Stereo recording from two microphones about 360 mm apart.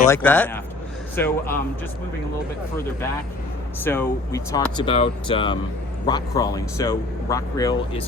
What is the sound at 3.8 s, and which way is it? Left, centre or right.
Speech, centre.